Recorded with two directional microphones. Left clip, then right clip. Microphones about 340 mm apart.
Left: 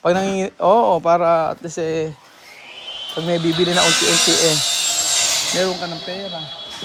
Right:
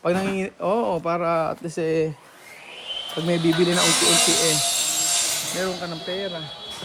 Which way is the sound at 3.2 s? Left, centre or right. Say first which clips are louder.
Left 2 dB; centre.